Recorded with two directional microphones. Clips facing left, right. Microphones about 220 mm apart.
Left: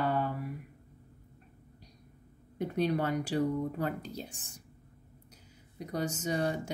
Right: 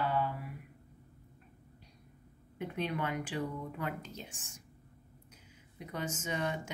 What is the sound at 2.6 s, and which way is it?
Speech, 40° left (ahead or behind).